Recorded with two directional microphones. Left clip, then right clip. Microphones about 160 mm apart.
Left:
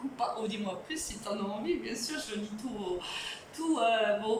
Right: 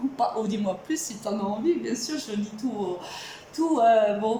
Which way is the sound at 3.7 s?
35° right (ahead or behind).